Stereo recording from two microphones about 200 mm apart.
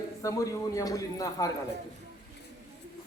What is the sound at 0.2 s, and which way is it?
A man's voice, 15° left (ahead or behind).